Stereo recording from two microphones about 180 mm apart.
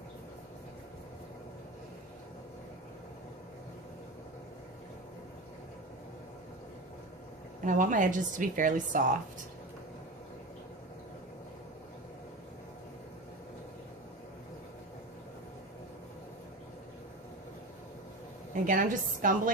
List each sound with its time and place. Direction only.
7.6 s a woman's voice: 45° right (ahead or behind)
18.7 s a woman's voice: 50° right (ahead or behind)